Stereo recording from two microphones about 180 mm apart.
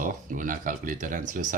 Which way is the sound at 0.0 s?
45° right (ahead or behind).